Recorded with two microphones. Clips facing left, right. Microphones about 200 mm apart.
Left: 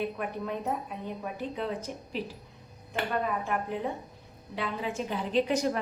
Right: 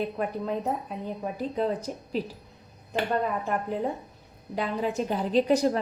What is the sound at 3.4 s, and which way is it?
A woman's voice, 40° right (ahead or behind).